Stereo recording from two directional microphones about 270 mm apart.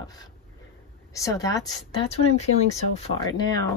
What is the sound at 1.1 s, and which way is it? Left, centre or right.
A woman's voice, centre.